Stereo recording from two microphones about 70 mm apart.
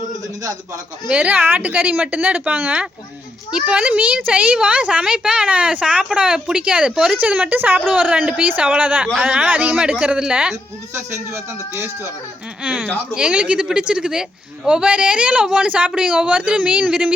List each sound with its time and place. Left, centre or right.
1.0 s a woman's voice: centre
7.2 s a woman's voice: right
12.6 s a woman's voice: centre